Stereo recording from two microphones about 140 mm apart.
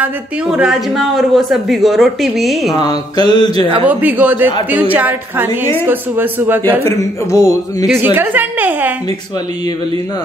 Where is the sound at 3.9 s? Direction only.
10° right (ahead or behind).